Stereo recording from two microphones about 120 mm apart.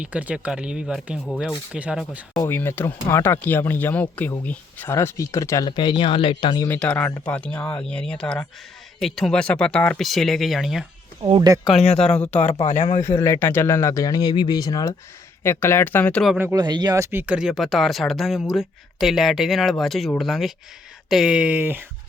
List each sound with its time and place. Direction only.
0.0 s speech: 10° right (ahead or behind)
2.5 s speech: 20° left (ahead or behind)
5.6 s speech: 40° left (ahead or behind)
6.7 s speech: 10° left (ahead or behind)
11.3 s speech: 30° right (ahead or behind)
11.9 s speech: 5° left (ahead or behind)
12.2 s speech: 15° left (ahead or behind)
12.5 s speech: 50° left (ahead or behind)
13.0 s speech: 25° left (ahead or behind)
15.4 s speech: 20° left (ahead or behind)
16.6 s speech: 35° right (ahead or behind); by 17.3 s 20° right (ahead or behind)
17.3 s speech: 5° right (ahead or behind)